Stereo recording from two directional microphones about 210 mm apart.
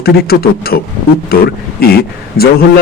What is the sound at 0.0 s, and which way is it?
A man's voice, 45° left (ahead or behind).